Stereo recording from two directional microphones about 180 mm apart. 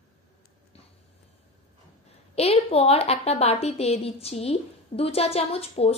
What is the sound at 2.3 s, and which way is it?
A woman's voice, 35° left (ahead or behind).